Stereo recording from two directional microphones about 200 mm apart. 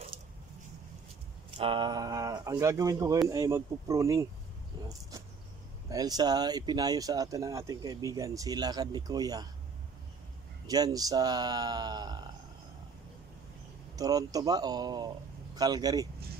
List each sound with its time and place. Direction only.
1.6 s speech: 25° right (ahead or behind)
5.9 s speech: 20° right (ahead or behind)
10.7 s speech: 20° right (ahead or behind)
13.9 s speech: 20° right (ahead or behind)